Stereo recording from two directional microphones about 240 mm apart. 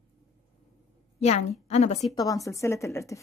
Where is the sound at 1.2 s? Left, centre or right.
Left.